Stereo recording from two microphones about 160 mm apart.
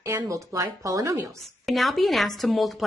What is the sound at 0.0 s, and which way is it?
A woman's voice, 20° right (ahead or behind).